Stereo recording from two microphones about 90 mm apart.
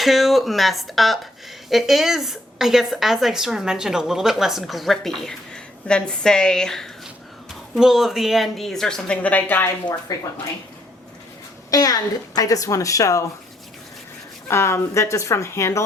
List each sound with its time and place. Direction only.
0.0 s a woman's voice: centre (ahead or behind)
7.8 s a woman's voice: 5° right (ahead or behind); by 9.6 s 20° left (ahead or behind)
10.1 s speech: 45° left (ahead or behind)
11.7 s a woman's voice: 45° left (ahead or behind)
14.4 s a woman's voice: 30° left (ahead or behind)